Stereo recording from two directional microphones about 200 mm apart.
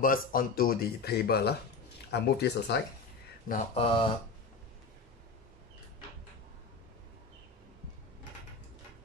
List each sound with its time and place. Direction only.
0.0 s speech: 45° left (ahead or behind)
3.7 s speech: 25° left (ahead or behind)